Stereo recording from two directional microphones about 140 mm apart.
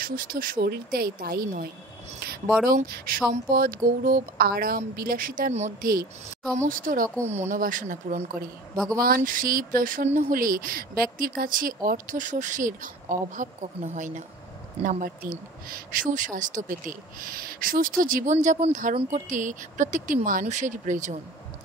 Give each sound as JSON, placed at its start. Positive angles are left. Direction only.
{"t": 0.0, "sound": "speech", "side_deg": -90}
{"t": 6.7, "sound": "a woman's voice", "side_deg": -75}
{"t": 8.9, "sound": "a woman's voice", "side_deg": -90}
{"t": 17.2, "sound": "speech", "side_deg": -90}